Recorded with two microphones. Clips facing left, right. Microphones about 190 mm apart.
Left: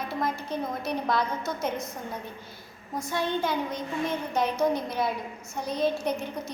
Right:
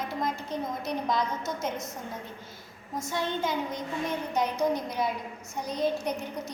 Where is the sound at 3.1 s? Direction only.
60° left (ahead or behind).